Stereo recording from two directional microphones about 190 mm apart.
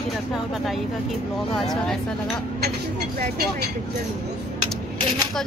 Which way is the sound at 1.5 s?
Centre (ahead or behind).